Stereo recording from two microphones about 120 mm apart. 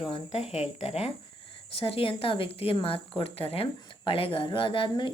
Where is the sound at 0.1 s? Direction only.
60° left (ahead or behind).